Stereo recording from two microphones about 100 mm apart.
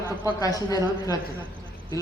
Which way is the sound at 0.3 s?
35° left (ahead or behind).